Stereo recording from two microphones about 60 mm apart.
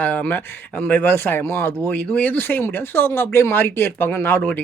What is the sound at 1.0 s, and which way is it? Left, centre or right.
Speech, left.